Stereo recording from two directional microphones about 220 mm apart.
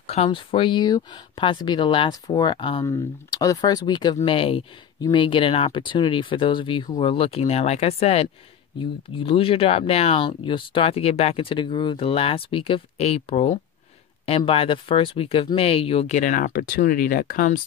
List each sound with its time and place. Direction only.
0.0 s speech: 30° left (ahead or behind)